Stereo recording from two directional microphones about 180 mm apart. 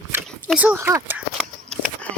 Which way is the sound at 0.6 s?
10° right (ahead or behind).